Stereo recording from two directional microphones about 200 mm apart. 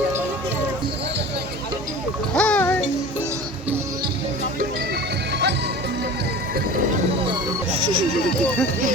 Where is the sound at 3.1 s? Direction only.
10° right (ahead or behind).